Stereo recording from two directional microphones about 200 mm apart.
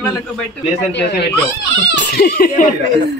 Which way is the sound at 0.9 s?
55° left (ahead or behind).